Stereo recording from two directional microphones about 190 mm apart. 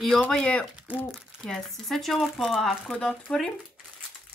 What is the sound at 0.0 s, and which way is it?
Speech, centre (ahead or behind).